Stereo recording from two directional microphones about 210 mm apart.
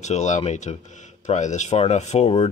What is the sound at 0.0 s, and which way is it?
A man's voice, 35° left (ahead or behind).